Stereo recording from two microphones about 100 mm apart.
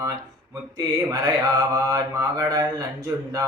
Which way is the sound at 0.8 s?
40° right (ahead or behind).